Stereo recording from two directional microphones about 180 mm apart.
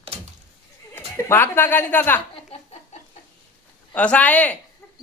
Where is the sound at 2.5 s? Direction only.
35° left (ahead or behind).